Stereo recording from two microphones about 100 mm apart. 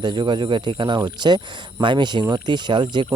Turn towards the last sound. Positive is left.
turn(degrees=-50)  # may be behind; listen again after turning